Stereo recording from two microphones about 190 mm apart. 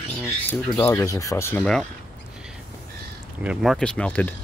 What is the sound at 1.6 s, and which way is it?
Speech, centre (ahead or behind).